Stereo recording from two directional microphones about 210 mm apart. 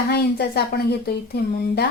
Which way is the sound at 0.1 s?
50° left (ahead or behind).